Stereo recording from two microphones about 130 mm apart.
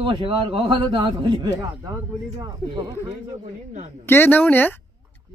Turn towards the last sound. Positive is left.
turn(degrees=15)  # may be behind; listen again after turning